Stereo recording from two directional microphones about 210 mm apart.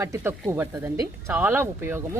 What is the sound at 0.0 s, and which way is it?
Speech, 10° right (ahead or behind).